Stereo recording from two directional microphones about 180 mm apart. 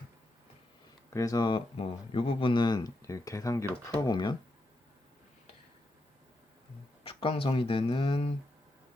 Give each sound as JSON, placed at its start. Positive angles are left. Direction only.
{"t": 1.1, "sound": "speech", "side_deg": 20}
{"t": 7.0, "sound": "speech", "side_deg": 30}